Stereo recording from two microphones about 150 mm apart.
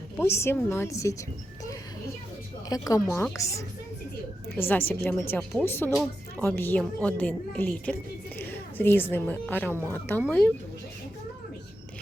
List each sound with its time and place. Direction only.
0.2 s speech: 15° left (ahead or behind)
2.7 s a woman's voice: 25° left (ahead or behind)